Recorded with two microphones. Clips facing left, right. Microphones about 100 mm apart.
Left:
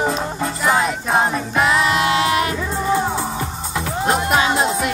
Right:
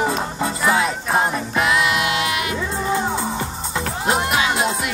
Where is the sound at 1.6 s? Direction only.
35° left (ahead or behind).